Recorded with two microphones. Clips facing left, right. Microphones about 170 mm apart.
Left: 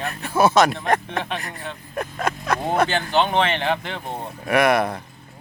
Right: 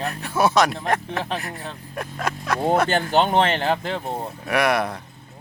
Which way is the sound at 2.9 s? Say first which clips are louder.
Right 1 dB; 45° right (ahead or behind).